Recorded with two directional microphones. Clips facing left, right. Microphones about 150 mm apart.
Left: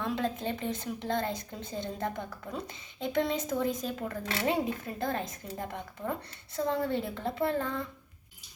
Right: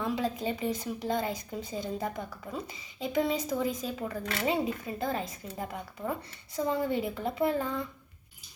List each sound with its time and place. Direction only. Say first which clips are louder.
0.0 s a woman's voice: right 1 dB; 5° right (ahead or behind)